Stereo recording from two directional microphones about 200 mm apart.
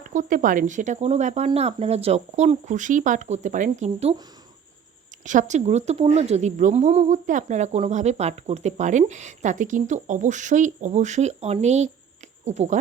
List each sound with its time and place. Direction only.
0.1 s speech: 40° right (ahead or behind)
5.2 s speech: 40° right (ahead or behind)